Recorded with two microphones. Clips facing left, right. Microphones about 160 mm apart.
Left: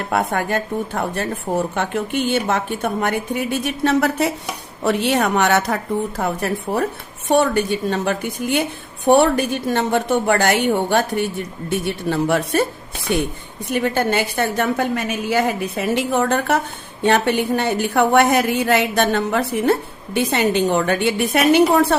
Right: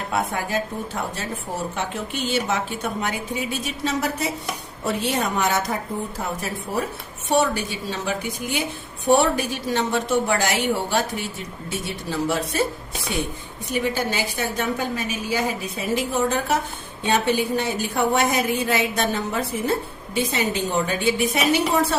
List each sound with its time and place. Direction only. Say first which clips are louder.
0.1 s a woman's voice: left 5 dB; 60° left (ahead or behind)